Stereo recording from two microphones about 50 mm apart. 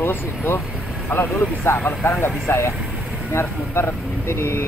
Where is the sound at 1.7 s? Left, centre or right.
Left.